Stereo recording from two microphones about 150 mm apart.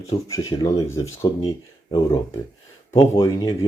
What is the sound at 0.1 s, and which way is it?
Speech, 25° left (ahead or behind).